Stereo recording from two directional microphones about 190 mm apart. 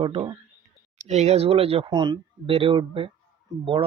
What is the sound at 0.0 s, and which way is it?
Speech, 25° right (ahead or behind).